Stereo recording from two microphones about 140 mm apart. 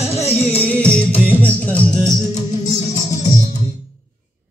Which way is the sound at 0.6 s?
10° left (ahead or behind).